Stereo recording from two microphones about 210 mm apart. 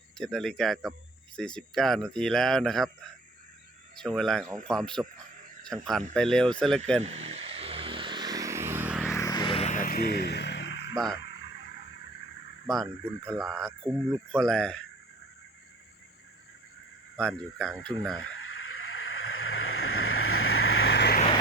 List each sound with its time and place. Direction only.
0.2 s speech: centre (ahead or behind)
3.9 s speech: centre (ahead or behind)
7.0 s vehicle: 30° right (ahead or behind); by 9.1 s 5° right (ahead or behind)
9.1 s a sound: 15° left (ahead or behind); by 10.9 s 55° left (ahead or behind)
10.9 s speech: centre (ahead or behind)
11.2 s a sound: 55° left (ahead or behind)
12.6 s speech: centre (ahead or behind)
17.2 s speech: 5° left (ahead or behind)
18.9 s vehicle: 80° left; by 21.2 s 55° left (ahead or behind)